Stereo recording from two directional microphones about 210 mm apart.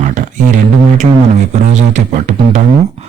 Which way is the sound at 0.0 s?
35° right (ahead or behind).